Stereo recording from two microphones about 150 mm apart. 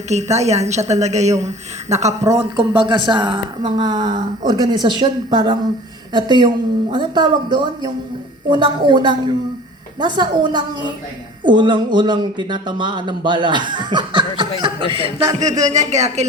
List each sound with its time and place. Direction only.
0.1 s a woman's voice: 50° right (ahead or behind)
2.4 s a woman's voice: 30° right (ahead or behind); by 16.2 s 50° right (ahead or behind)